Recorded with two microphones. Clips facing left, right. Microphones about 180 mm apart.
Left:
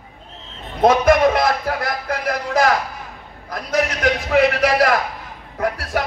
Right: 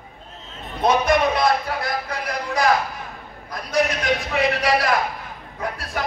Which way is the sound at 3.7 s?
65° left (ahead or behind).